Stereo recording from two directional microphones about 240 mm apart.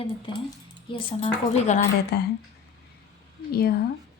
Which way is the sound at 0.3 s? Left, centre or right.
Centre.